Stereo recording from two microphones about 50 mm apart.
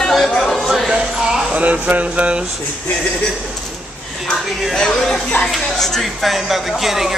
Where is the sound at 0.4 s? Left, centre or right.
Centre.